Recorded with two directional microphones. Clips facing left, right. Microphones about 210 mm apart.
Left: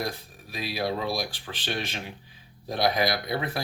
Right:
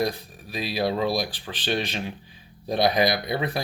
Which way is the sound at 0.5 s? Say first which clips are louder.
Right 4 dB; 25° right (ahead or behind).